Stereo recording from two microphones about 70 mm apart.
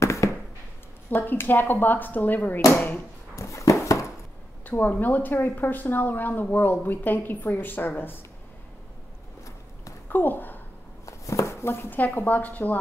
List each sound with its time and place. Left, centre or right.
0.0 s a sound: left
1.1 s a woman's voice: left
3.3 s dog: left
4.6 s a woman's voice: left
10.0 s a woman's voice: left
11.1 s chopping: left
12.0 s a woman's voice: left